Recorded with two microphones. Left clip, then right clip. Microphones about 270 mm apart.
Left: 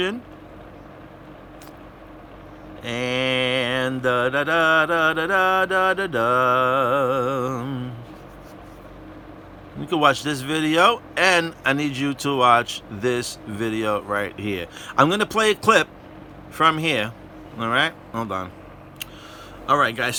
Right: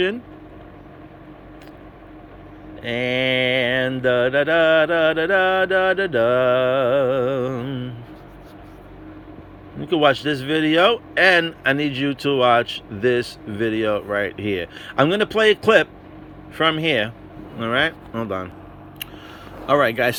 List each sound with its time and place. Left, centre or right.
2.8 s speech: centre
9.8 s speech: centre
19.6 s speech: centre